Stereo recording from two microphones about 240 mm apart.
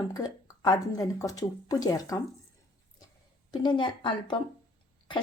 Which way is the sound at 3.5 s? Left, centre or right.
Centre.